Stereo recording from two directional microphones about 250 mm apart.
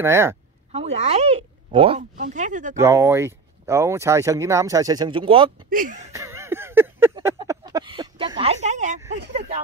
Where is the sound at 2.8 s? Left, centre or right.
Centre.